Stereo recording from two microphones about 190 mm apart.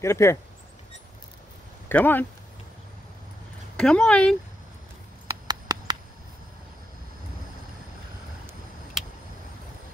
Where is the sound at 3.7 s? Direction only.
5° left (ahead or behind).